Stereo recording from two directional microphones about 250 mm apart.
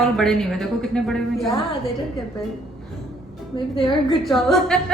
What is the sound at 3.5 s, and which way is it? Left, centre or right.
Speech, centre.